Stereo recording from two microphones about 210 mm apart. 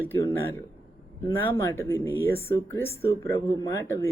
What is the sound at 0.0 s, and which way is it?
Speech, 10° left (ahead or behind).